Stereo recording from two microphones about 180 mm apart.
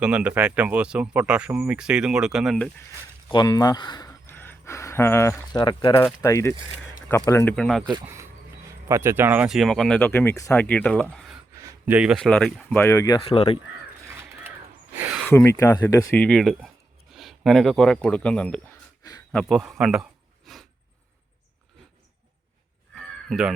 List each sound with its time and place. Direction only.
0.0 s speech: 5° right (ahead or behind)
3.2 s a sound: 25° left (ahead or behind)
5.5 s speech: 25° left (ahead or behind)
6.2 s speech: 15° left (ahead or behind)
7.5 s speech: centre (ahead or behind)
8.0 s speech: 15° right (ahead or behind); by 11.0 s 5° left (ahead or behind)
11.5 s speech: 10° right (ahead or behind); by 13.2 s 15° left (ahead or behind)
13.2 s speech: 30° left (ahead or behind)
14.1 s mechanisms: 15° right (ahead or behind)
15.3 s speech: 10° left (ahead or behind)
23.0 s caw: centre (ahead or behind)